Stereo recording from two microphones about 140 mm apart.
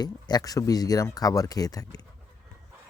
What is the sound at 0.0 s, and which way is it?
Speech, 30° left (ahead or behind).